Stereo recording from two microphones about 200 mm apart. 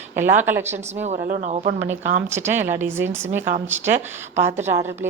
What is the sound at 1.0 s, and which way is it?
Speech, 35° right (ahead or behind).